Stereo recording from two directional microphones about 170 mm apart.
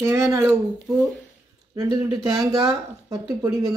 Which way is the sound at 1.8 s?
20° right (ahead or behind).